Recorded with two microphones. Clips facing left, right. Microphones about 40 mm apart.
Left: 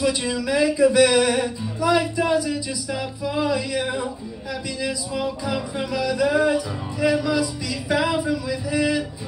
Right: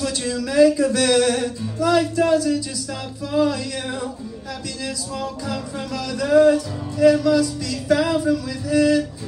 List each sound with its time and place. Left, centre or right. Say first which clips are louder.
0.0 s music: left 2 dB; centre